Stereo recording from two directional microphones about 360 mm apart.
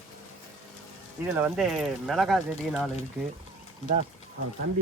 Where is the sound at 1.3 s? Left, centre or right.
Centre.